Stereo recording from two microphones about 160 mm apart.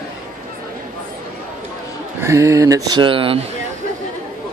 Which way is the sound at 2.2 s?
20° right (ahead or behind).